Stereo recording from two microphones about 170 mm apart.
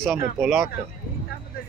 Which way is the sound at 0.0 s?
Centre (ahead or behind).